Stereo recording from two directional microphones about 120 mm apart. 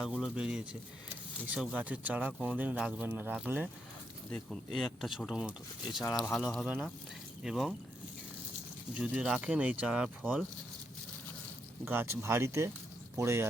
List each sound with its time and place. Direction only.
0.0 s speech: 5° right (ahead or behind)
4.3 s speech: centre (ahead or behind)
9.0 s speech: 10° right (ahead or behind)
11.9 s speech: 20° right (ahead or behind)